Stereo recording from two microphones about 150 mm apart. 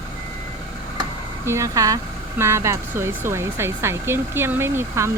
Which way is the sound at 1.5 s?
20° right (ahead or behind).